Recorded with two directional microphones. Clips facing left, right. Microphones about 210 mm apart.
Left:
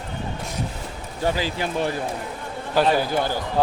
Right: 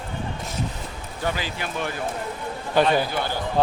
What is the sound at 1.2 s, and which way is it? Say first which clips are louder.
Speech: left 4 dB; 35° left (ahead or behind).